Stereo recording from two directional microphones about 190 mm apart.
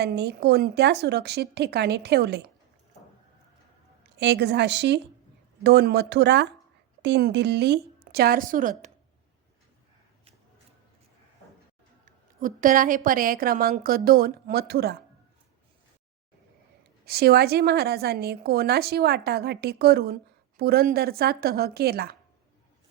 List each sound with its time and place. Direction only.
0.0 s a woman's voice: 60° right (ahead or behind)
4.2 s a woman's voice: 60° right (ahead or behind); by 8.7 s 45° right (ahead or behind)
12.4 s a woman's voice: 45° right (ahead or behind)
17.1 s a woman's voice: 55° right (ahead or behind)